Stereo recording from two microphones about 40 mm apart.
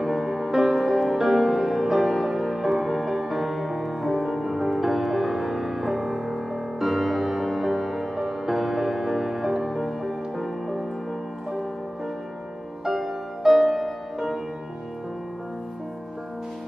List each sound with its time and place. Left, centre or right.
0.0 s music: centre
12.8 s music: centre